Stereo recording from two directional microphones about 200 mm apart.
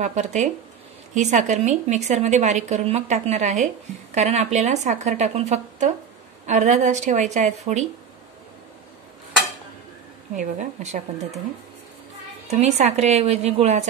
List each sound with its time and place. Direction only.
0.0 s speech: 35° right (ahead or behind)
10.3 s speech: 40° right (ahead or behind)
12.4 s speech: 35° right (ahead or behind)